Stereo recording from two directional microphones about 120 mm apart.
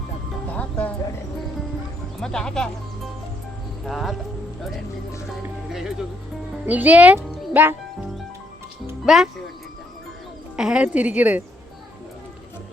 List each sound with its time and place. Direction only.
0.5 s music: 10° left (ahead or behind)
2.2 s speech: 5° left (ahead or behind)
5.7 s a woman's voice: 5° right (ahead or behind)
7.3 s music: 15° right (ahead or behind)
9.0 s speech: centre (ahead or behind)
10.6 s a woman's voice: 5° right (ahead or behind)